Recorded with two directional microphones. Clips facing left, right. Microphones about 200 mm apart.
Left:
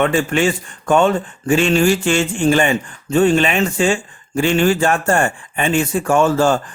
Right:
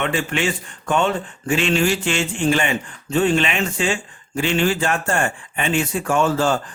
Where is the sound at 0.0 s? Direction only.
45° left (ahead or behind).